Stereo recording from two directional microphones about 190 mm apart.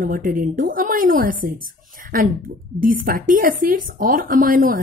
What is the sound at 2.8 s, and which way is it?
A woman's voice, 45° right (ahead or behind).